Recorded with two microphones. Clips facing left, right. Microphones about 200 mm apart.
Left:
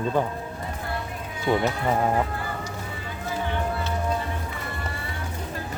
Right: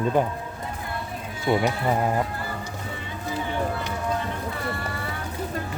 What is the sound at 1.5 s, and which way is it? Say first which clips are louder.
Speech: right 1 dB; 5° right (ahead or behind).